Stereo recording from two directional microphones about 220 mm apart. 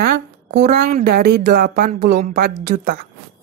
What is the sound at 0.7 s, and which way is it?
Speech, 45° right (ahead or behind).